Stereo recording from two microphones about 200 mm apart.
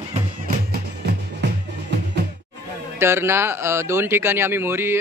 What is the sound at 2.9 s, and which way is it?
Speech, 10° right (ahead or behind).